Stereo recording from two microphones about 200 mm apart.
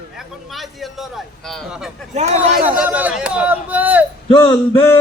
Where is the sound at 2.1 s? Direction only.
35° right (ahead or behind).